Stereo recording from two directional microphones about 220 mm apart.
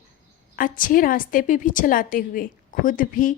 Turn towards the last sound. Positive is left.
turn(degrees=40)  # may be behind; listen again after turning